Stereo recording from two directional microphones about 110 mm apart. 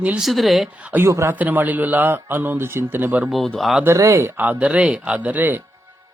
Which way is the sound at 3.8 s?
25° right (ahead or behind).